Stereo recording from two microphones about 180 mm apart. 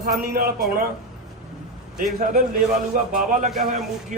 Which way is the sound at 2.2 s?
50° right (ahead or behind).